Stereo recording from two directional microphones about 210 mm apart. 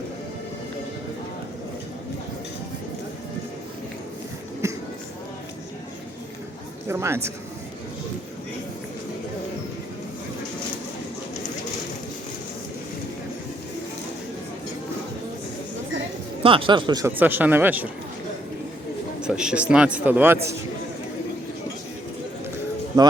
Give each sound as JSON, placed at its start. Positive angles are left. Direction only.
{"t": 4.6, "sound": "music", "side_deg": -15}
{"t": 6.8, "sound": "speech", "side_deg": -10}
{"t": 16.4, "sound": "speech", "side_deg": -25}
{"t": 17.2, "sound": "speech", "side_deg": -10}
{"t": 19.2, "sound": "a man's voice", "side_deg": -5}